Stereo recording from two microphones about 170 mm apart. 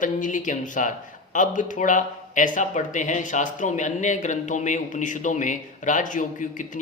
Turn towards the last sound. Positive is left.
turn(degrees=50)  # may be behind; listen again after turning